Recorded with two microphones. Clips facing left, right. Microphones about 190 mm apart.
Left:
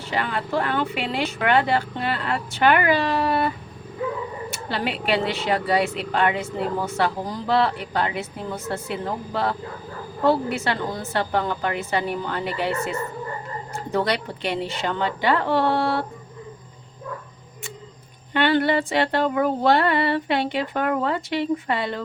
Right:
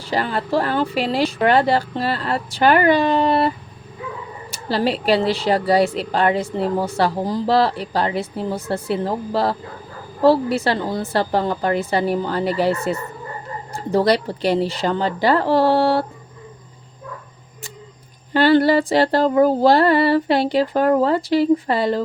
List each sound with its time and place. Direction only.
0.0 s speech: 35° right (ahead or behind)
4.5 s speech: 35° right (ahead or behind)
18.3 s speech: 35° right (ahead or behind)